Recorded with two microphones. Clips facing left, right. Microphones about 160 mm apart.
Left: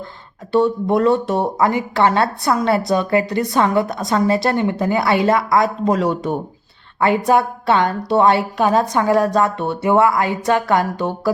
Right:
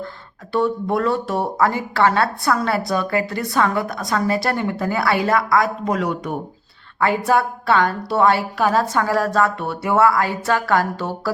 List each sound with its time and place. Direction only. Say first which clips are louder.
0.5 s speech: left 4 dB; 20° left (ahead or behind)